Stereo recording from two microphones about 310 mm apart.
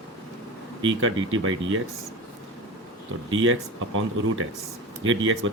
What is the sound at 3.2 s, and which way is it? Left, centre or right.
Speech, right.